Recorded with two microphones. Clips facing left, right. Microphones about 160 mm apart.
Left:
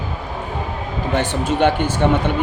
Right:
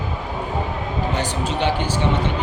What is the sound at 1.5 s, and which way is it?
Speech, 50° left (ahead or behind).